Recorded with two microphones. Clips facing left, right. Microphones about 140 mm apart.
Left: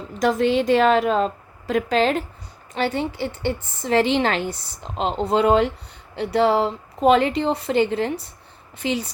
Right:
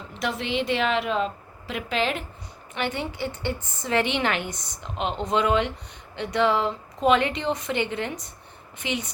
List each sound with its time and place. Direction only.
0.2 s a woman's voice: 45° left (ahead or behind)